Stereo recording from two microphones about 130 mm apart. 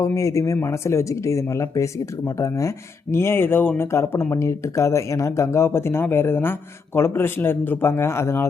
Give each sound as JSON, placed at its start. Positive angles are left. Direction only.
{"t": 0.0, "sound": "speech", "side_deg": 25}